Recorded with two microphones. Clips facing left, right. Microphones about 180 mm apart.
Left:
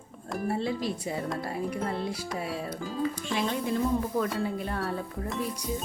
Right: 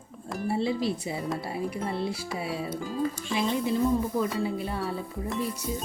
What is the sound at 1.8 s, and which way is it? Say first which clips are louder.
Speech: right 1 dB; 10° right (ahead or behind).